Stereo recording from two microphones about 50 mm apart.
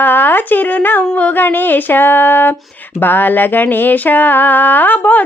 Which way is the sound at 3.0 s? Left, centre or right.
Left.